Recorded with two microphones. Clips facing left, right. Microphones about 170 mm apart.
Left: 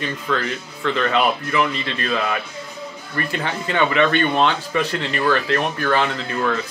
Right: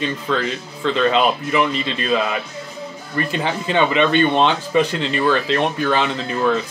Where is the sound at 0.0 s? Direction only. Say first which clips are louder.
Right 2 dB; 20° right (ahead or behind).